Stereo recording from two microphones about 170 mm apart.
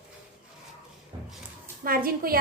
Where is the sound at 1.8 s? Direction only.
60° right (ahead or behind).